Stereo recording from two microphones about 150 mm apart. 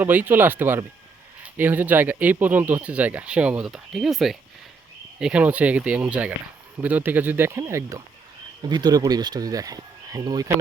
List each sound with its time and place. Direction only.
0.0 s speech: 10° right (ahead or behind)